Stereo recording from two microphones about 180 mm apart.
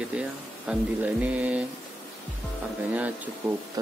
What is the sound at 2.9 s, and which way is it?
Speech, 10° right (ahead or behind).